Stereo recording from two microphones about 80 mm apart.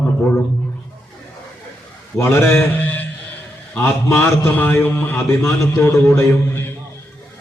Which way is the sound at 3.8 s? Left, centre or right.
Left.